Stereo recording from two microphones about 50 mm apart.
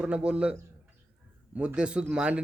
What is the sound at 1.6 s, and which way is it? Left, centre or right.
Speech, centre.